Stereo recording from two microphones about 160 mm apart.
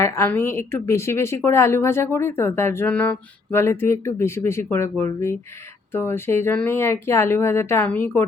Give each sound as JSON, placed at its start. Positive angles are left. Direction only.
{"t": 0.0, "sound": "a woman's voice", "side_deg": 15}